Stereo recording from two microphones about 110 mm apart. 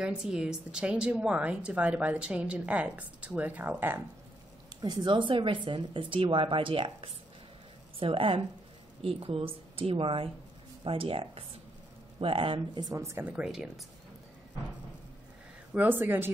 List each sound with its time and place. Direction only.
0.0 s a woman's voice: 5° right (ahead or behind)
4.8 s a woman's voice: 45° right (ahead or behind)
13.0 s speech: 25° right (ahead or behind)
13.4 s a woman's voice: 10° right (ahead or behind)
15.7 s a woman's voice: 15° right (ahead or behind)